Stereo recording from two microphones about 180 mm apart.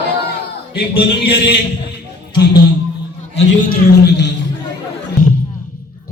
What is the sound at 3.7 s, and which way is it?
Music, 70° left (ahead or behind).